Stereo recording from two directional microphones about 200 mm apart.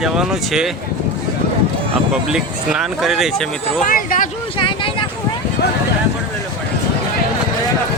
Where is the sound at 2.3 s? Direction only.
5° right (ahead or behind).